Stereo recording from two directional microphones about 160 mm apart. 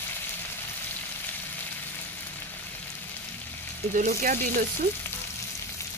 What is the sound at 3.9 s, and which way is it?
Speech, 55° right (ahead or behind).